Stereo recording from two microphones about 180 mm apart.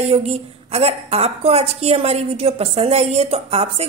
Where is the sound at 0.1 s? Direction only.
35° right (ahead or behind).